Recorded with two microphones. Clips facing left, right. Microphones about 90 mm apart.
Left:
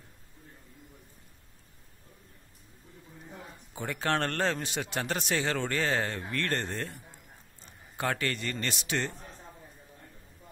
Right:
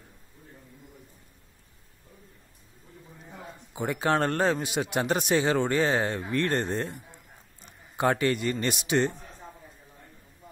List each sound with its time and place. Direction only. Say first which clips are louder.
3.7 s a man's voice: right 5 dB; 15° right (ahead or behind)